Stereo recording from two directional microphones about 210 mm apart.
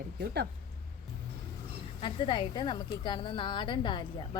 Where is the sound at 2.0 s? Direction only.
25° left (ahead or behind).